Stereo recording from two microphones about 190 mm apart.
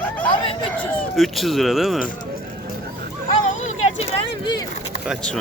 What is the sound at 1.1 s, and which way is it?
Speech, centre (ahead or behind).